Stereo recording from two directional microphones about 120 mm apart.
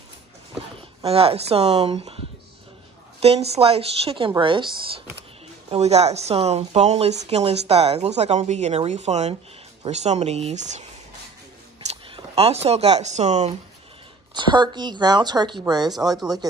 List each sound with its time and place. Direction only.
1.0 s speech: 55° right (ahead or behind)
4.4 s speech: 45° right (ahead or behind)
5.7 s speech: 60° right (ahead or behind)
11.9 s speech: 55° right (ahead or behind)
14.3 s speech: 40° right (ahead or behind)